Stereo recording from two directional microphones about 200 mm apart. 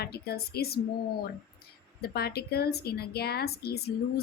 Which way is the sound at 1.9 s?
50° left (ahead or behind).